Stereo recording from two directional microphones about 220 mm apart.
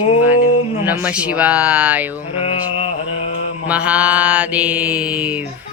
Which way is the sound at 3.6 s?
5° right (ahead or behind).